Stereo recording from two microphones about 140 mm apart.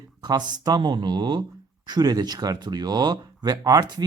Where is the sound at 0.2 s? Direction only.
30° right (ahead or behind).